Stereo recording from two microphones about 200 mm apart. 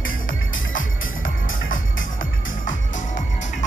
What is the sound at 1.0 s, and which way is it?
Music, 90° left.